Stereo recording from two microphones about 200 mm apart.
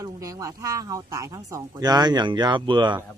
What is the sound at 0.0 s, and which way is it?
Speech, 15° right (ahead or behind).